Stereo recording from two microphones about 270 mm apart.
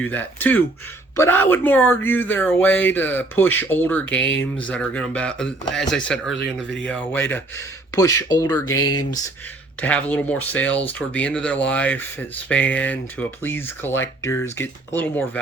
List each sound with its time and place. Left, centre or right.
0.0 s speech: centre
8.8 s speech: left
9.8 s speech: centre